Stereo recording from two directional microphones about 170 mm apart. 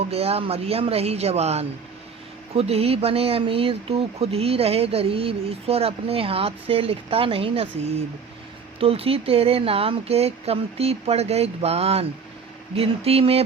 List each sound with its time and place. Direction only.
0.1 s speech: 35° right (ahead or behind)